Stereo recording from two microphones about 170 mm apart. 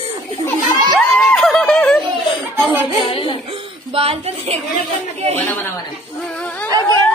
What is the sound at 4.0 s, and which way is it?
Speech, 35° right (ahead or behind).